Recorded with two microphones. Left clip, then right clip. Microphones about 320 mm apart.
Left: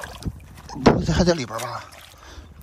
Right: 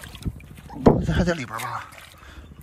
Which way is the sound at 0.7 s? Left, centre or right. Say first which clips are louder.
Left 1 dB; right.